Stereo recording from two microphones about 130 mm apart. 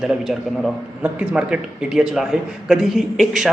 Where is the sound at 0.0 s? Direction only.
Centre (ahead or behind).